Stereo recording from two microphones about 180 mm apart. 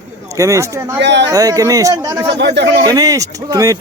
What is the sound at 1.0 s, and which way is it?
Speech, 75° right (ahead or behind).